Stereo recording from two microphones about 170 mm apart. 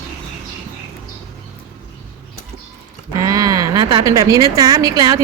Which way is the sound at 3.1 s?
20° right (ahead or behind).